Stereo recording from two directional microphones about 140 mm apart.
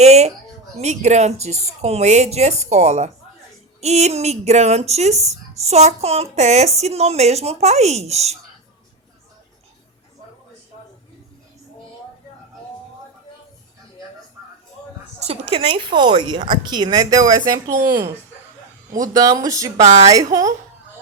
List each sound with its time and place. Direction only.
0.0 s a sound: 50° right (ahead or behind)
0.8 s a child's voice: 55° right (ahead or behind)
15.2 s a woman's voice: 45° right (ahead or behind); by 19.8 s 25° right (ahead or behind)
19.8 s a child's voice: 50° right (ahead or behind)
20.1 s speech: 25° right (ahead or behind)